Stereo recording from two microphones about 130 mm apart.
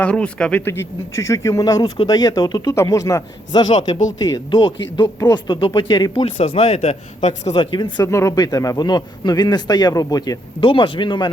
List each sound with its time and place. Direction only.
0.0 s speech: 10° left (ahead or behind)
0.6 s speech: 20° left (ahead or behind); by 6.2 s 40° left (ahead or behind)
6.2 s speech: 50° left (ahead or behind)
7.5 s speech: 35° left (ahead or behind)
7.9 s speech: 20° left (ahead or behind)
10.6 s speech: 40° left (ahead or behind)